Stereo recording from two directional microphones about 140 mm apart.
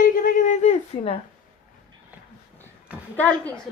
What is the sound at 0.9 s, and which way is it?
Speech, 40° left (ahead or behind).